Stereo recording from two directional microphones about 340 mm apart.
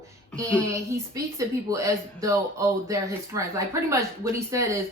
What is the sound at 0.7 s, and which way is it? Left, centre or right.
Speech, centre.